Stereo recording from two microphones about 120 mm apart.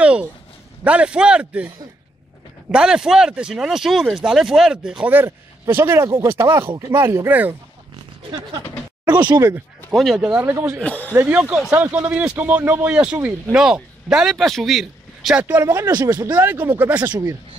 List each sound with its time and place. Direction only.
0.0 s a sound: 10° right (ahead or behind)
0.8 s speech: 10° right (ahead or behind)
2.7 s speech: 5° right (ahead or behind)
9.1 s speech: 35° right (ahead or behind)
9.9 s speech: centre (ahead or behind)
10.2 s speech: 15° right (ahead or behind)
10.8 s speech: 10° left (ahead or behind)
11.1 s speech: 15° right (ahead or behind)
15.4 s speech: 20° right (ahead or behind)